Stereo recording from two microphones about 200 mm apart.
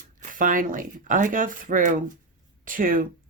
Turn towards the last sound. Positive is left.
turn(degrees=-45)  # may be behind; listen again after turning